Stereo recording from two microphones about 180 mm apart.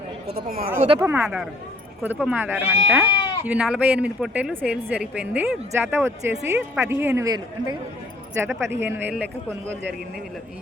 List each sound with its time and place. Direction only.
0.3 s speech: 60° right (ahead or behind)
0.9 s a woman's voice: 10° right (ahead or behind)